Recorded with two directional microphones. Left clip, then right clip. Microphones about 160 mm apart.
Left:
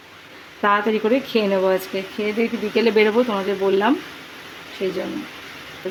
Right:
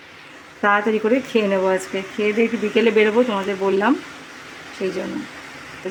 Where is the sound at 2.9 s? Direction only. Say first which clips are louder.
Even; 15° left (ahead or behind).